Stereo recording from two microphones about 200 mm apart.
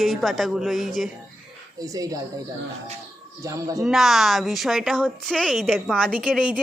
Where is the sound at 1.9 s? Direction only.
15° right (ahead or behind).